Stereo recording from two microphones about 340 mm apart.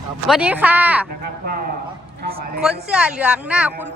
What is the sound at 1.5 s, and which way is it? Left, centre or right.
Speech, right.